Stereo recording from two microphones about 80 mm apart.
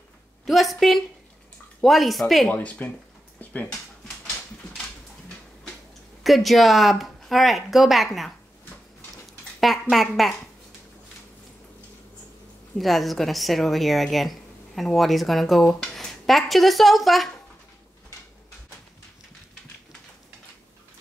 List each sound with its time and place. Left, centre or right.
0.5 s speech: centre
2.5 s speech: centre
3.3 s a sound: centre
6.2 s speech: centre
9.6 s speech: centre
12.7 s speech: centre